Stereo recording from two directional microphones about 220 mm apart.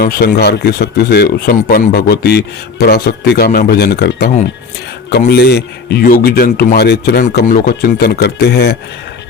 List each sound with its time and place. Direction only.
0.0 s speech: 45° left (ahead or behind)